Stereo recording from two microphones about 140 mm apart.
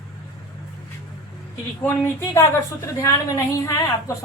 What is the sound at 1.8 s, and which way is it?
A woman's voice, 15° left (ahead or behind).